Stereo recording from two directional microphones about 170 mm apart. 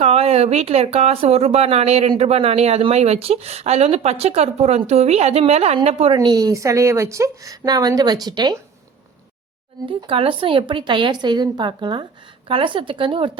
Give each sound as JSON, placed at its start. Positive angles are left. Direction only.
{"t": 0.0, "sound": "speech", "side_deg": -35}
{"t": 6.1, "sound": "a woman's voice", "side_deg": -20}
{"t": 10.1, "sound": "a woman's voice", "side_deg": -30}